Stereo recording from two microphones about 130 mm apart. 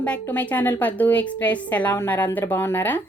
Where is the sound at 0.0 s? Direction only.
10° left (ahead or behind).